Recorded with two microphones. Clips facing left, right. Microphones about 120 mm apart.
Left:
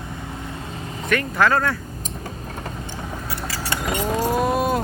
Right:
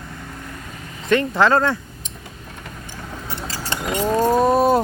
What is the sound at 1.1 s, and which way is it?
Speech, 25° right (ahead or behind).